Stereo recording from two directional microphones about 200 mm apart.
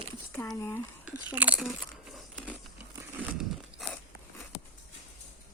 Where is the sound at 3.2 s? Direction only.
5° right (ahead or behind).